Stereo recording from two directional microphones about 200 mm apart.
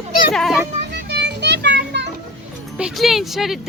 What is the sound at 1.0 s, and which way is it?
Children playing, 60° right (ahead or behind).